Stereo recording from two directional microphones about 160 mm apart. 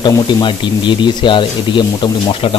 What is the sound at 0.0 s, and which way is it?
Speech, 30° left (ahead or behind).